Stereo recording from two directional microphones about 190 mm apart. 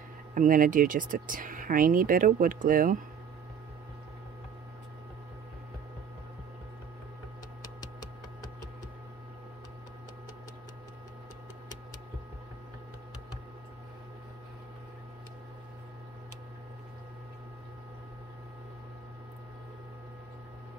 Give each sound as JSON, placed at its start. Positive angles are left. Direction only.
{"t": 0.3, "sound": "speech", "side_deg": -45}